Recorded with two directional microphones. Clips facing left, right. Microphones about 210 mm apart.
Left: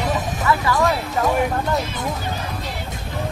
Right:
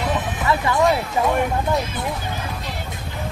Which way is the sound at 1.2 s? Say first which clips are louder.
Left 2 dB; centre (ahead or behind).